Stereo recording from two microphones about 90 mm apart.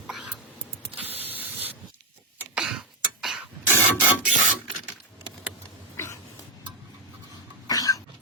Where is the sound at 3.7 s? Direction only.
30° right (ahead or behind).